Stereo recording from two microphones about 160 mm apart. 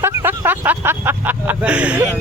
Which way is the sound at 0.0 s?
15° right (ahead or behind).